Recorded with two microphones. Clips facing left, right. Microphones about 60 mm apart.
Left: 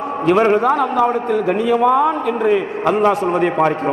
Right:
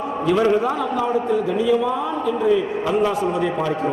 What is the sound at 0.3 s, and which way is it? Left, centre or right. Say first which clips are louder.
A man's voice: left 5 dB; left.